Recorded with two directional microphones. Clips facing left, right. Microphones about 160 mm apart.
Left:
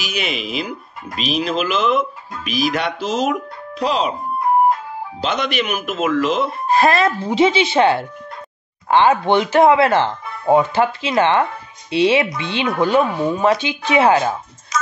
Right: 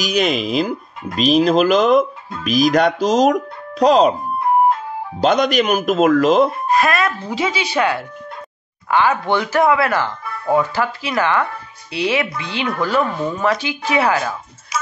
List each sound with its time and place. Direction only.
0.0 s speech: 40° right (ahead or behind)
5.2 s speech: 40° right (ahead or behind)
6.7 s speech: 30° left (ahead or behind)
14.7 s music: 10° right (ahead or behind)